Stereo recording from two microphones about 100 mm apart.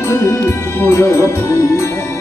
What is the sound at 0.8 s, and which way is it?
Music, 30° left (ahead or behind).